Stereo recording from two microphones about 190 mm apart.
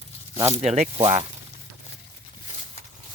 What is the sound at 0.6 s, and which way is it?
Speech, 35° right (ahead or behind).